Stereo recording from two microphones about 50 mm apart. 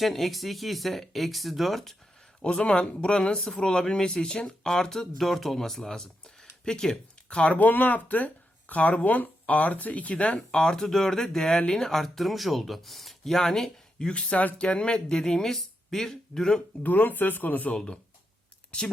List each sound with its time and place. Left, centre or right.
0.0 s speech: centre
2.4 s speech: centre
7.3 s speech: left
10.5 s speech: centre
16.8 s speech: left
17.7 s speech: left